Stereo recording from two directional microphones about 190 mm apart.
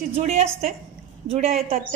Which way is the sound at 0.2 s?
35° right (ahead or behind).